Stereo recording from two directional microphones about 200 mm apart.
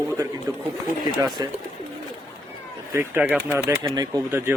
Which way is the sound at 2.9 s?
10° right (ahead or behind).